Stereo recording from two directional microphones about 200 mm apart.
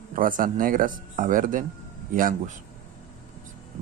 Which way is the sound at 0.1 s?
40° right (ahead or behind).